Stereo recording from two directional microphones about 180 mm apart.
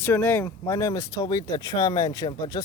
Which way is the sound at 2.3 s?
20° left (ahead or behind).